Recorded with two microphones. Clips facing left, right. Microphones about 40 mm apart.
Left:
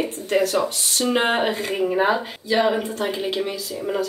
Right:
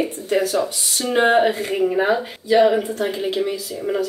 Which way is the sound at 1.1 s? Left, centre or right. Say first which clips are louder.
Right 5 dB; centre.